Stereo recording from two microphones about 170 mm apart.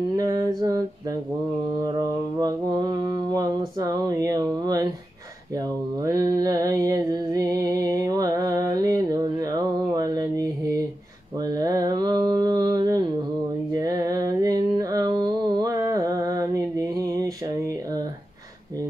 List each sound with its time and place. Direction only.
0.1 s mantra: 20° right (ahead or behind)
2.4 s a sound: 25° right (ahead or behind)
5.9 s music: 20° right (ahead or behind)
11.3 s mantra: 20° right (ahead or behind)
13.7 s music: 20° right (ahead or behind)